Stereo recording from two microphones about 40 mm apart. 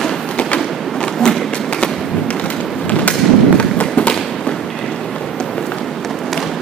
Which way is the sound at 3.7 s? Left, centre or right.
Left.